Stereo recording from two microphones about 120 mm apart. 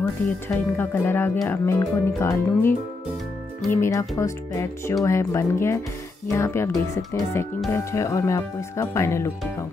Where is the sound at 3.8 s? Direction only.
25° left (ahead or behind).